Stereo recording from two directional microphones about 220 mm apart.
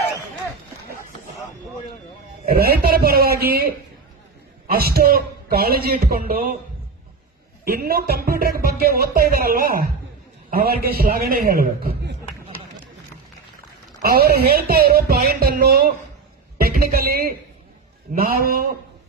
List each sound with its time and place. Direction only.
2.5 s speech: 45° right (ahead or behind)
4.6 s speech: 45° right (ahead or behind)
7.6 s speech: 45° right (ahead or behind)
14.1 s a man's voice: 45° right (ahead or behind)